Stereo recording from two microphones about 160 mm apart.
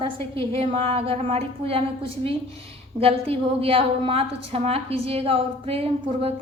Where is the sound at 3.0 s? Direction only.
35° right (ahead or behind).